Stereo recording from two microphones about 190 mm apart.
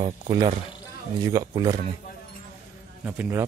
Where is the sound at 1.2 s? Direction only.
20° right (ahead or behind).